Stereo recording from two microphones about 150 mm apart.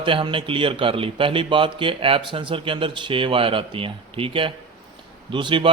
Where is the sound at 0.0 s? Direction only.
35° right (ahead or behind).